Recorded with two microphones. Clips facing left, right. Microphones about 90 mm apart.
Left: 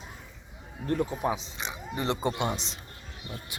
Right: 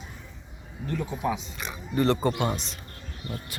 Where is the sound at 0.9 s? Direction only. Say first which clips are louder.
Left 2 dB; 40° left (ahead or behind).